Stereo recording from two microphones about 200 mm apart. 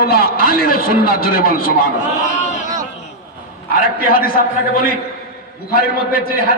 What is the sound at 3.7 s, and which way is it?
A man's voice, 45° left (ahead or behind).